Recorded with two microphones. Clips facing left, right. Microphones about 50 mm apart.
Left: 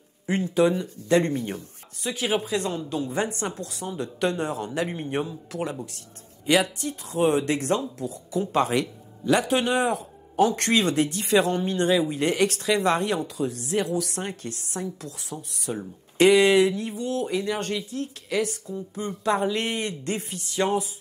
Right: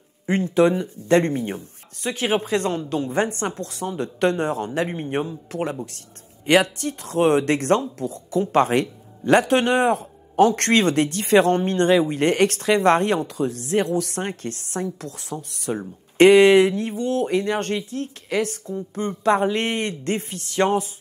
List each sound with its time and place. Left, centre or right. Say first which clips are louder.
0.3 s speech: right 4 dB; right
1.3 s speech: right 3 dB; right
2.0 s speech: right 4 dB; right
4.8 s a man's voice: right 3 dB; centre
5.5 s speech: right 4 dB; right